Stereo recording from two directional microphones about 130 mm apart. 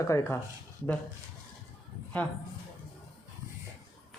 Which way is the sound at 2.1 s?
15° left (ahead or behind).